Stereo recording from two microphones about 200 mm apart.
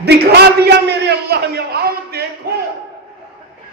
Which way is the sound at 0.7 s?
55° right (ahead or behind).